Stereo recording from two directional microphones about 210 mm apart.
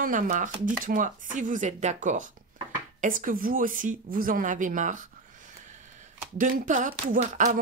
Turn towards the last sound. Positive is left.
turn(degrees=-35)  # may be behind; listen again after turning